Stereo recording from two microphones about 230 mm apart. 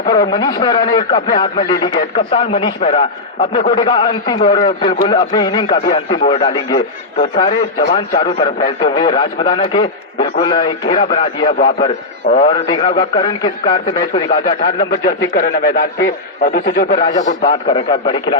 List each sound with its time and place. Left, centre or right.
0.0 s speech: centre
14.8 s a man's voice: left
17.2 s a man's voice: left